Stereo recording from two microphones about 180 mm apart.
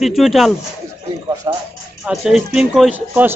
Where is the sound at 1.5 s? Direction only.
25° right (ahead or behind).